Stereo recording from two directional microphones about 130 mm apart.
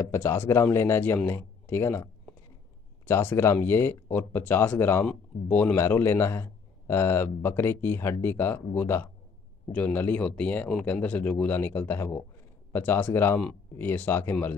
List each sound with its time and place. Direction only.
0.0 s speech: 20° left (ahead or behind)